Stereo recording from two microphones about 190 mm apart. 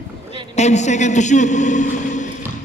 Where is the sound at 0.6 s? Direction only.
35° left (ahead or behind).